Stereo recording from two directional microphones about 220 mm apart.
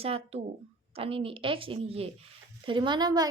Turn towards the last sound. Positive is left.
turn(degrees=-20)  # may be behind; listen again after turning